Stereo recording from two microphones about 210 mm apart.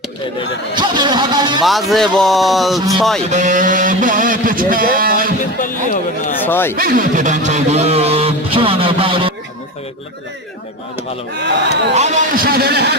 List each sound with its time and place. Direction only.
0.8 s a man's voice: 20° right (ahead or behind)
1.6 s speech: centre (ahead or behind)
3.2 s speech: 35° right (ahead or behind)
5.5 s speech: 40° left (ahead or behind)
6.4 s speech: 10° left (ahead or behind)
6.7 s speech: 45° right (ahead or behind); by 9.3 s 25° right (ahead or behind)
11.3 s speech: 55° right (ahead or behind)
11.9 s a man's voice: 35° right (ahead or behind); by 13.0 s 50° right (ahead or behind)